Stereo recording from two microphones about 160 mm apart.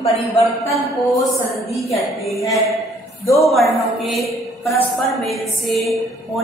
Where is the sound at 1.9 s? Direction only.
20° left (ahead or behind).